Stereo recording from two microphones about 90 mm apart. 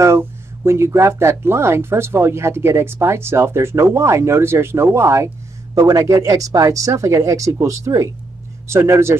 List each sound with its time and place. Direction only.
0.0 s speech: 30° right (ahead or behind)